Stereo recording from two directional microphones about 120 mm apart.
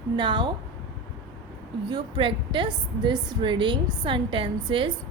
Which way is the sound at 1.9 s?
45° right (ahead or behind).